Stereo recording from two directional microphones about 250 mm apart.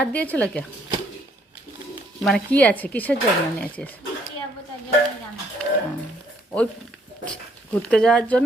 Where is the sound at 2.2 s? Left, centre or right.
Centre.